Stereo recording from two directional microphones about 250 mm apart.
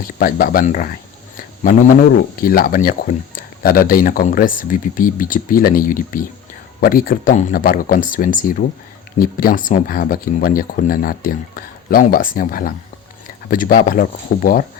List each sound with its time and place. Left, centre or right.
0.2 s speech: left
2.4 s speech: left